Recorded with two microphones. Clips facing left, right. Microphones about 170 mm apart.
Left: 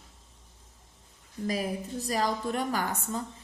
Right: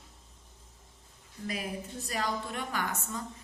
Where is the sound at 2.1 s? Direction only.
35° left (ahead or behind).